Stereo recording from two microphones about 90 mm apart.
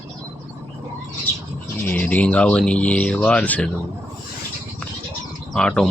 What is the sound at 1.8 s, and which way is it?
Speech, 20° left (ahead or behind).